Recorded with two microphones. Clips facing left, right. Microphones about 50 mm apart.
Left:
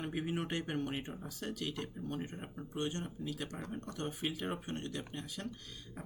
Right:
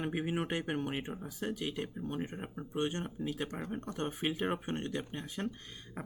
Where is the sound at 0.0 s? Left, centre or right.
Right.